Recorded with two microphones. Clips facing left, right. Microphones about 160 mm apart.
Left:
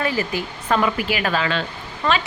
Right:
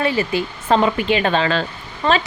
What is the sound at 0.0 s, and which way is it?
A woman's voice, 20° right (ahead or behind).